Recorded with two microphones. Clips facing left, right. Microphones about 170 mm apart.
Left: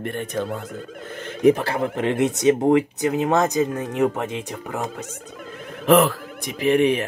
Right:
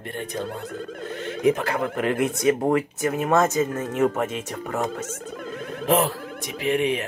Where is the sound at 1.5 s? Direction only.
30° left (ahead or behind).